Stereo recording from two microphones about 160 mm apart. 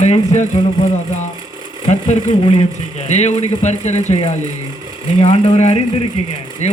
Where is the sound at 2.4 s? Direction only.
35° left (ahead or behind).